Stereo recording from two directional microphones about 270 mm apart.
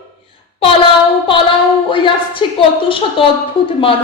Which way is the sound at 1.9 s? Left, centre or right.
Centre.